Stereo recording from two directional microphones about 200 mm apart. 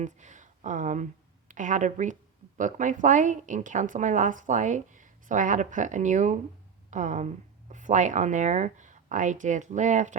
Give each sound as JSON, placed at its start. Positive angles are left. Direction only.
{"t": 0.0, "sound": "a woman's voice", "side_deg": -35}